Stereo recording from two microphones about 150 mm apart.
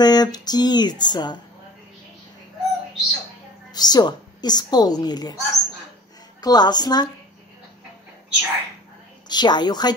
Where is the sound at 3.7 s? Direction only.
25° left (ahead or behind).